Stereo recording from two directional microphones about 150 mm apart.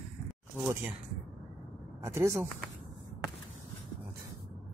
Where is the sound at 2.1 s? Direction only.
15° right (ahead or behind).